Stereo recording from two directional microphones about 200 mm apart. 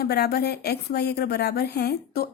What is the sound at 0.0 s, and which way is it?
A woman's voice, 50° left (ahead or behind).